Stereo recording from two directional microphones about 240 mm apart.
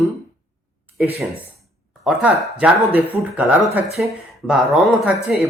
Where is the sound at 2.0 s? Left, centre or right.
Centre.